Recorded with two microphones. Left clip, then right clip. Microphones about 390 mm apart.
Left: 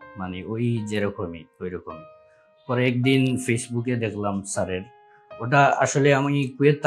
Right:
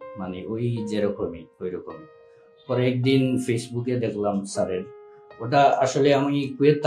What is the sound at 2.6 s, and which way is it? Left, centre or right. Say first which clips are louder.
Speech: left 1 dB; left.